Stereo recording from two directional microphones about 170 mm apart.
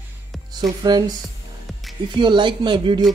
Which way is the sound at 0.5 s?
25° right (ahead or behind).